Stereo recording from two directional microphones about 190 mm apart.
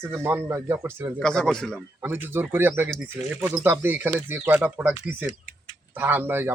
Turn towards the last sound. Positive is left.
turn(degrees=-10)  # may be behind; listen again after turning